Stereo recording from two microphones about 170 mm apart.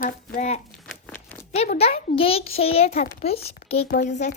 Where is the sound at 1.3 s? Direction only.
10° left (ahead or behind).